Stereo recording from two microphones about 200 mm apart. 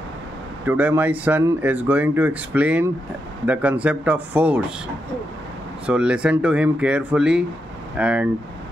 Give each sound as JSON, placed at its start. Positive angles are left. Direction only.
{"t": 0.7, "sound": "speech", "side_deg": -10}
{"t": 5.9, "sound": "speech", "side_deg": -5}